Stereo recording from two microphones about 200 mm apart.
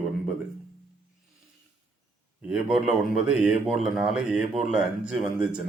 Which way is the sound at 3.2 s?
5° right (ahead or behind).